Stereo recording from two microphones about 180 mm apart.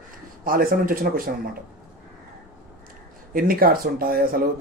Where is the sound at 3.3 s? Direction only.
55° right (ahead or behind).